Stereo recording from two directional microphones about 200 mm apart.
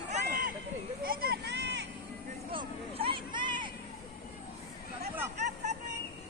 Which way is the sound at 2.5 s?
25° right (ahead or behind).